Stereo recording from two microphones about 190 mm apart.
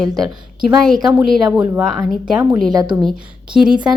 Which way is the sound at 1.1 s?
Centre (ahead or behind).